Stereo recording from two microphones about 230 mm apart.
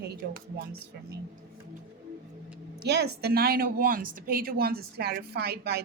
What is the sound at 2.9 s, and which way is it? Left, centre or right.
A woman's voice, right.